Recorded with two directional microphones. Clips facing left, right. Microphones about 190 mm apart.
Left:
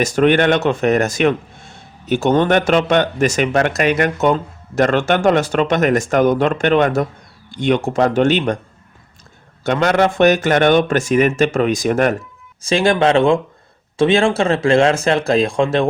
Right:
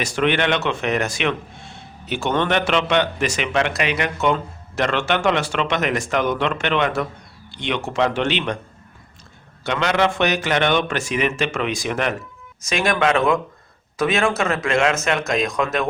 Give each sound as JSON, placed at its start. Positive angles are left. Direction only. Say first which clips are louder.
{"t": 0.0, "sound": "speech", "louder": "left 7 dB", "side_deg": 45}
{"t": 9.6, "sound": "speech", "louder": "left 5 dB", "side_deg": 45}
{"t": 12.6, "sound": "speech", "louder": "left 5 dB", "side_deg": 30}